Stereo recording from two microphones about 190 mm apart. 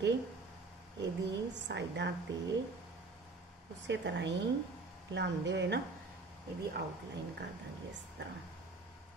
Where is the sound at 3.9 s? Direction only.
70° right (ahead or behind).